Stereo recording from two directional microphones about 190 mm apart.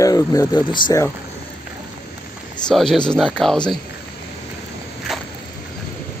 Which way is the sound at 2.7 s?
5° left (ahead or behind).